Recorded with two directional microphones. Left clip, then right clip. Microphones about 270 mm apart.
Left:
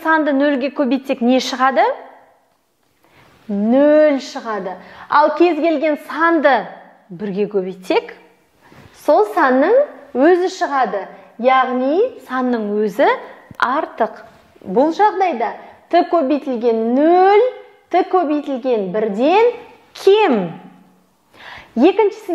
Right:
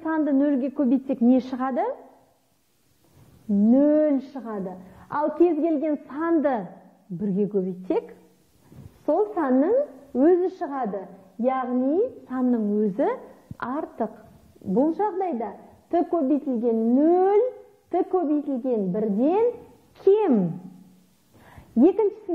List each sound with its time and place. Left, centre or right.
0.0 s a woman's voice: centre
3.5 s a woman's voice: centre
15.0 s a woman's voice: centre
21.4 s a sound: centre
21.8 s a woman's voice: centre